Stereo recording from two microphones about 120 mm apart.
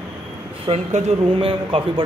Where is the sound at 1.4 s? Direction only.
50° right (ahead or behind).